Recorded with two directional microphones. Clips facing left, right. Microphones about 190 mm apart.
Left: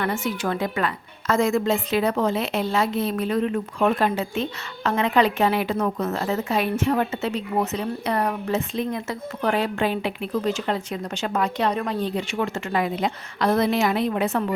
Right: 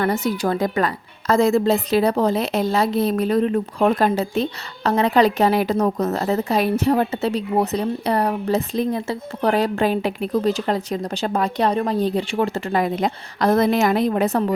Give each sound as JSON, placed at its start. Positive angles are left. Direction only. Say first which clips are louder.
{"t": 0.0, "sound": "a woman's voice", "louder": "right 5 dB", "side_deg": -40}